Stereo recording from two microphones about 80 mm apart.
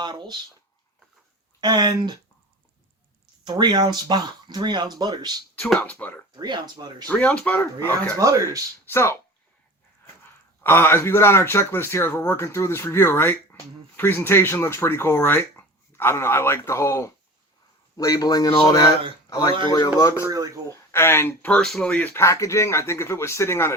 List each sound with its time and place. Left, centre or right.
0.0 s speech: right
1.6 s speech: right
3.4 s speech: right
5.8 s speech: centre
6.3 s speech: right
7.1 s speech: centre
8.9 s a man's voice: left
10.6 s a man's voice: left
17.9 s a man's voice: left
20.3 s a man's voice: right
20.9 s a man's voice: left
21.5 s speech: centre
21.8 s speech: centre
22.1 s a man's voice: left